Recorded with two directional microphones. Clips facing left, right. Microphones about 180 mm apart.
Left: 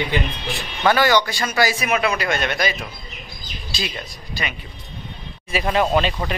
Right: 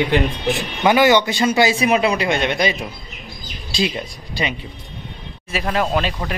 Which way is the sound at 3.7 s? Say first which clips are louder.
Right 8 dB; 25° right (ahead or behind).